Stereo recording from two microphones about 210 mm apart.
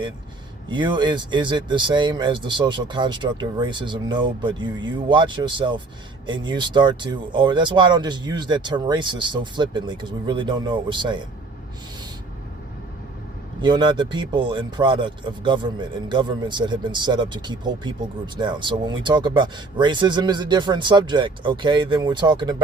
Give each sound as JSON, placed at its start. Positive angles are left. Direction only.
{"t": 0.7, "sound": "speech", "side_deg": -20}
{"t": 13.6, "sound": "speech", "side_deg": -20}